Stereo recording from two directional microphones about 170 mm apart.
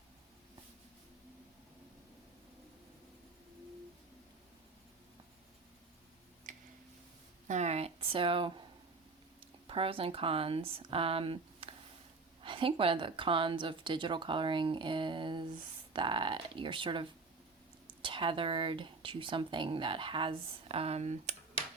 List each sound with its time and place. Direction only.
6.5 s tick-tock: 50° right (ahead or behind)
7.4 s a sound: 40° right (ahead or behind)
9.6 s a woman's voice: 35° right (ahead or behind)